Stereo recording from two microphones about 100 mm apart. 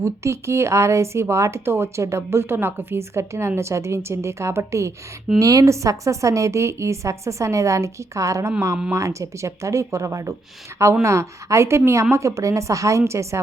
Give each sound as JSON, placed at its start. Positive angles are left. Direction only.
{"t": 0.0, "sound": "a woman's voice", "side_deg": -30}